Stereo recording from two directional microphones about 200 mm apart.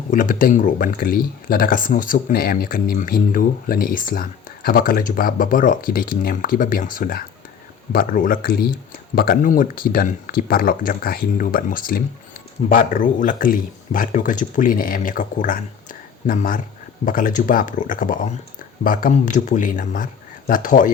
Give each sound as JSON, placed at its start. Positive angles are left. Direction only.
{"t": 0.1, "sound": "speech", "side_deg": 40}